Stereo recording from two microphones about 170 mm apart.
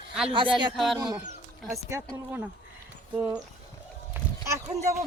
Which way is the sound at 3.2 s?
15° right (ahead or behind).